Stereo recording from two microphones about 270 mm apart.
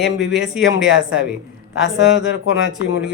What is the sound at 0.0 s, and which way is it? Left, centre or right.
Speech, centre.